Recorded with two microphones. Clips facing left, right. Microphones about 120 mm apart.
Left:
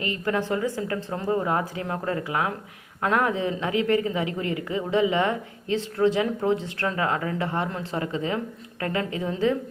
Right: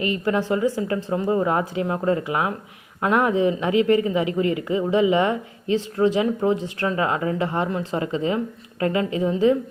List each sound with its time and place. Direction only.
0.0 s speech: 15° right (ahead or behind)